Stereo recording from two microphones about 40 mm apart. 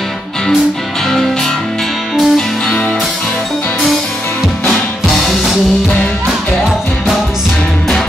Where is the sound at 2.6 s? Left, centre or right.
Left.